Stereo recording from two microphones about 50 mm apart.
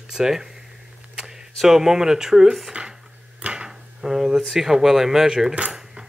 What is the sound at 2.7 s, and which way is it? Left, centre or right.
Speech, centre.